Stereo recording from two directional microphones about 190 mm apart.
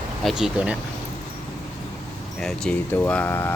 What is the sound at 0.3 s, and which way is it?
Speech, 5° right (ahead or behind).